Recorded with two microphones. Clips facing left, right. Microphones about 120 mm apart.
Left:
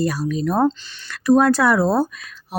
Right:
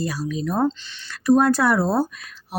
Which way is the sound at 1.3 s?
90° left.